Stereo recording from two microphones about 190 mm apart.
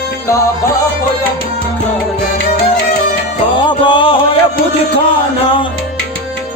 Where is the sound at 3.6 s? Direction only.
25° left (ahead or behind).